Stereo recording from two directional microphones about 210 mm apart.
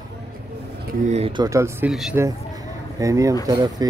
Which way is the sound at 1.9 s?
Centre (ahead or behind).